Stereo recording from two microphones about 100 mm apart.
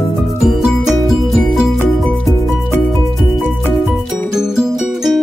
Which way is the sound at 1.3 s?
Centre (ahead or behind).